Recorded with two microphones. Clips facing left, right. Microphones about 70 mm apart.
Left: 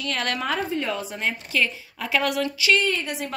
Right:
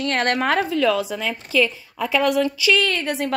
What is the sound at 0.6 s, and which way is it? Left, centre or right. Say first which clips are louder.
Speech: right 7 dB; right.